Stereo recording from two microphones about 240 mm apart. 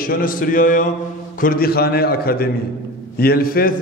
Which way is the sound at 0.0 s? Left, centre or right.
Left.